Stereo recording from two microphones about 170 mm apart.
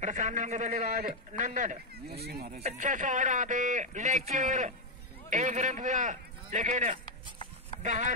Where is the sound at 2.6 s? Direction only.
50° right (ahead or behind).